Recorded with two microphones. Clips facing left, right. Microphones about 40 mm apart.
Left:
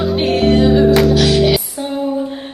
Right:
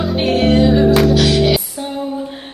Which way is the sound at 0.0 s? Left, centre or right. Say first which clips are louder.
Left 1 dB; centre.